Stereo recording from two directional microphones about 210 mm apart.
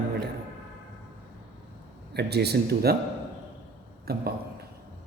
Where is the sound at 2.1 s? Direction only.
50° right (ahead or behind).